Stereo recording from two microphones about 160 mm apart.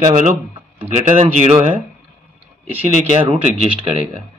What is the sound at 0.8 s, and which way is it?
Speech, 50° right (ahead or behind).